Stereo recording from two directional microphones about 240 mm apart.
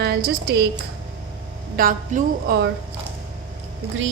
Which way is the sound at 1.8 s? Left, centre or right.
Right.